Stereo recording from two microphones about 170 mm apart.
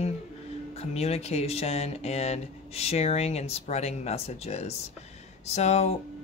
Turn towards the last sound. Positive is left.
turn(degrees=40)  # may be behind; listen again after turning